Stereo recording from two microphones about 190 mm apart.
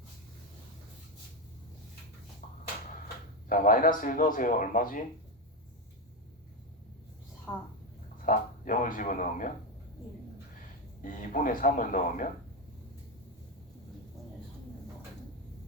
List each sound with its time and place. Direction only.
3.5 s speech: 45° left (ahead or behind)
8.2 s speech: 45° left (ahead or behind)
11.0 s speech: 45° left (ahead or behind)